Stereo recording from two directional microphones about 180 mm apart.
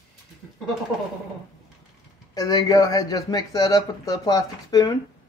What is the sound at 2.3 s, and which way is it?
Speech, 20° left (ahead or behind).